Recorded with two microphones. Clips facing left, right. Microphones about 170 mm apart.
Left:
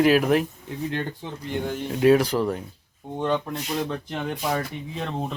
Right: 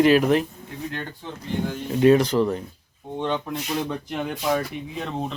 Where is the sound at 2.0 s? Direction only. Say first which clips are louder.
Right 2 dB; 5° left (ahead or behind).